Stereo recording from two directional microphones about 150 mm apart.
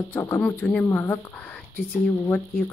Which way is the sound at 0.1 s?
10° left (ahead or behind).